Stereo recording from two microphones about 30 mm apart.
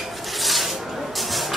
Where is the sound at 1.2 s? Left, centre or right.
Centre.